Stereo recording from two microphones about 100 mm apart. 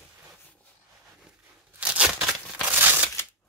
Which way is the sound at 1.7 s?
10° right (ahead or behind).